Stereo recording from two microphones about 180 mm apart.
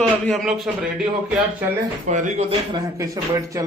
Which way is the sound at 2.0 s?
45° right (ahead or behind).